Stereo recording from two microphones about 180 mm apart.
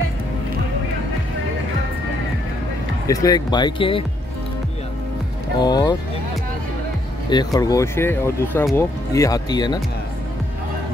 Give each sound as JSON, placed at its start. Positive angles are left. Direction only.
{"t": 3.1, "sound": "speech", "side_deg": 20}
{"t": 5.6, "sound": "speech", "side_deg": 25}
{"t": 7.2, "sound": "speech", "side_deg": 20}